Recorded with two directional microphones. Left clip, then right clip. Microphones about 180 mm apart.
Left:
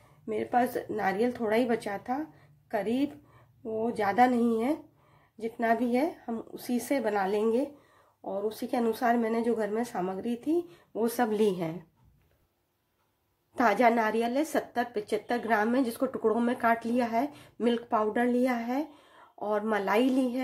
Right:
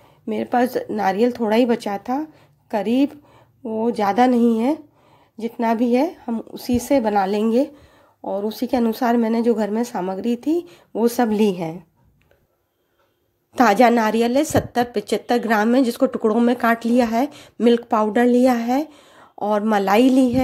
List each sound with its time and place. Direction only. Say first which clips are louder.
0.3 s a woman's voice: right 8 dB; 50° right (ahead or behind); by 11.7 s 30° right (ahead or behind)
13.6 s a woman's voice: right 9 dB; 45° right (ahead or behind)